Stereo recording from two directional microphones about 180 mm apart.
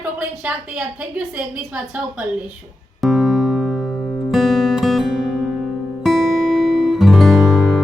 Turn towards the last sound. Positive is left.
turn(degrees=0)  # may be behind; listen again after turning